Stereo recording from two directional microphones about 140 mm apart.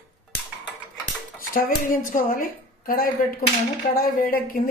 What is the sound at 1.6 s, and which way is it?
A woman's voice, 75° left (ahead or behind).